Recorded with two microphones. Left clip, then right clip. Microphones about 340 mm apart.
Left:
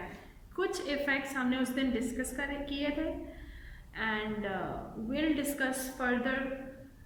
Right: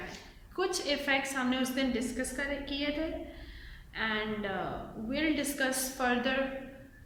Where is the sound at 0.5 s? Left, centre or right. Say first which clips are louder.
Right 2 dB; centre.